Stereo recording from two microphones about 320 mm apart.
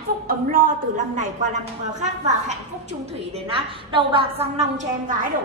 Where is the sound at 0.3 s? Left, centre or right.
Right.